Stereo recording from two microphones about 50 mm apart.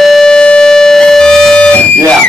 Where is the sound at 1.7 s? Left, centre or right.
Left.